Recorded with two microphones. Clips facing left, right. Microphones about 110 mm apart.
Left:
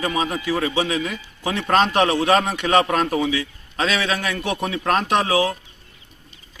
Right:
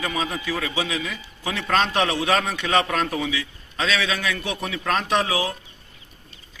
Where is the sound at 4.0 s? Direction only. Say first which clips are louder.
Left 2 dB; 45° left (ahead or behind).